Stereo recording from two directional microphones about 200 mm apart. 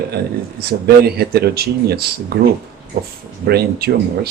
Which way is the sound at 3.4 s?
50° right (ahead or behind).